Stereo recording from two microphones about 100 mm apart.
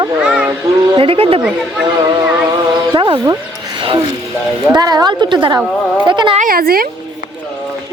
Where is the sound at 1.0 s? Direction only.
65° right (ahead or behind).